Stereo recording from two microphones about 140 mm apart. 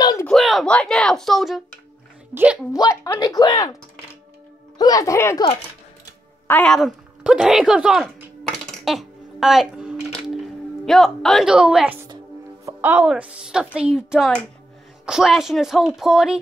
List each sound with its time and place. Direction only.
0.0 s a sound: 25° left (ahead or behind)
0.3 s a child's voice: centre (ahead or behind)
2.7 s speech: 25° left (ahead or behind)
4.7 s speech: 25° left (ahead or behind)
6.4 s a sound: 10° left (ahead or behind); by 12.1 s 10° right (ahead or behind)
12.6 s music: 15° right (ahead or behind)
13.0 s a woman's voice: 5° right (ahead or behind)